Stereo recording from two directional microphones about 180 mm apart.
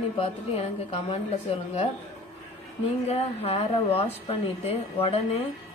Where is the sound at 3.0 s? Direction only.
35° left (ahead or behind).